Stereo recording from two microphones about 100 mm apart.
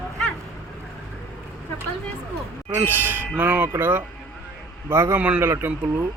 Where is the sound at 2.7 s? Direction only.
20° right (ahead or behind).